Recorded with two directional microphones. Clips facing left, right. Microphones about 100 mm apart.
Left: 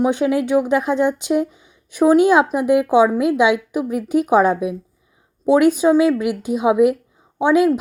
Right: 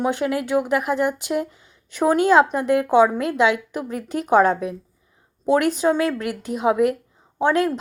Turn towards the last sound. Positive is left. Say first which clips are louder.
# left 4 dB
turn(degrees=15)  # may be behind; listen again after turning